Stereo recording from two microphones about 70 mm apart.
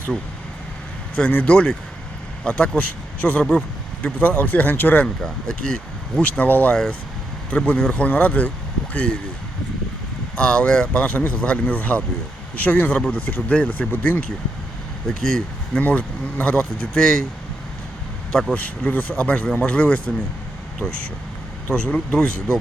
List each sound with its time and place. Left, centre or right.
1.1 s speech: centre
5.0 s speech: centre
10.3 s speech: centre
15.8 s speech: centre
18.5 s speech: centre
21.7 s speech: centre